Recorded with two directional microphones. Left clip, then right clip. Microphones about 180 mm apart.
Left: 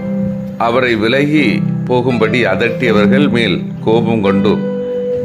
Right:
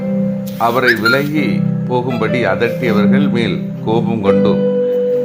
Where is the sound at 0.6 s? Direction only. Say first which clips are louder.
Even; 15° left (ahead or behind).